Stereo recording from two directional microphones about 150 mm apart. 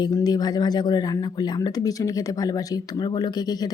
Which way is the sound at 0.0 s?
25° left (ahead or behind).